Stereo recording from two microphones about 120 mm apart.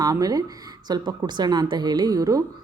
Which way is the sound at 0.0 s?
30° right (ahead or behind).